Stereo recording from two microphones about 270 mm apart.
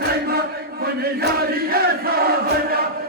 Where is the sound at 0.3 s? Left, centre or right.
Right.